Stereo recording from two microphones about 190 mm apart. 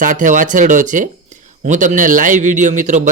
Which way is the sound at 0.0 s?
45° right (ahead or behind).